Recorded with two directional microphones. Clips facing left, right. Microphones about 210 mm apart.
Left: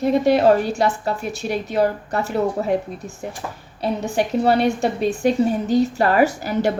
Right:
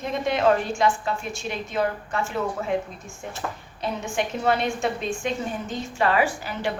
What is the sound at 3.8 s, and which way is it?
A woman's voice, 35° left (ahead or behind).